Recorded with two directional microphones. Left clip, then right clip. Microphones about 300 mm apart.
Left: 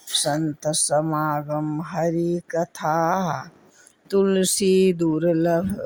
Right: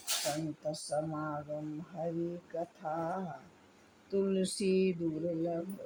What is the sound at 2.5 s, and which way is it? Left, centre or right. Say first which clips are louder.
Mantra: left 15 dB; left.